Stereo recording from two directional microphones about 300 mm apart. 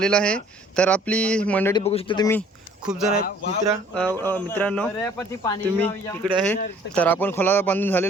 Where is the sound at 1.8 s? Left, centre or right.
Centre.